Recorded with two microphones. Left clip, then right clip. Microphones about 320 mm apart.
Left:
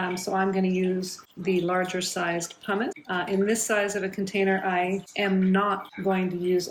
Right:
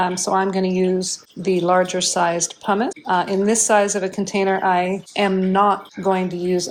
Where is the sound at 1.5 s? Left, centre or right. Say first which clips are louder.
Right 9 dB; right.